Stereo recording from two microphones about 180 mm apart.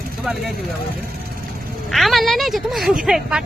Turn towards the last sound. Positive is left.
turn(degrees=-5)  # may be behind; listen again after turning